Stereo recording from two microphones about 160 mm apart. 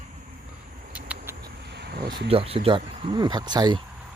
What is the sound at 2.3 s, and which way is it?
Speech, 35° right (ahead or behind).